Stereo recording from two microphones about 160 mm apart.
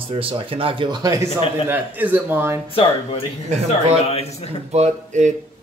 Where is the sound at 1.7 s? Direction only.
10° right (ahead or behind).